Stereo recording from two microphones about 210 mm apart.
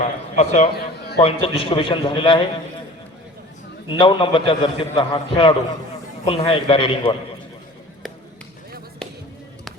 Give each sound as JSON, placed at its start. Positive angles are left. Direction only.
{"t": 0.0, "sound": "a man's voice", "side_deg": 35}
{"t": 3.8, "sound": "a man's voice", "side_deg": 25}